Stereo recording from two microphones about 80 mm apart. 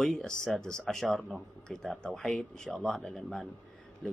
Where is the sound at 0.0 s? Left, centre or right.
Centre.